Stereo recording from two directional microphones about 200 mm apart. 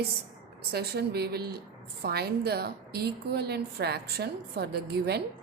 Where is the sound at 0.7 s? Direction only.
55° right (ahead or behind).